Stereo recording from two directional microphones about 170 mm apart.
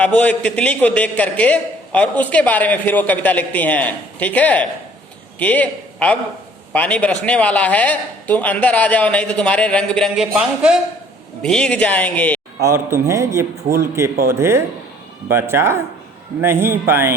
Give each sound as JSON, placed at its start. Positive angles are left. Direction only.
{"t": 0.0, "sound": "a man's voice", "side_deg": 10}
{"t": 12.6, "sound": "a man's voice", "side_deg": -15}